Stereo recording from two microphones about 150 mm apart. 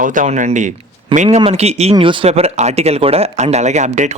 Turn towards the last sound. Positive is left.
turn(degrees=-50)  # may be behind; listen again after turning